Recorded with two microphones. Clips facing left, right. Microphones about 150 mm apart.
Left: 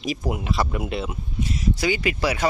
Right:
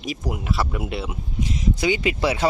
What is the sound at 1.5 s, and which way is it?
Speech, 20° right (ahead or behind).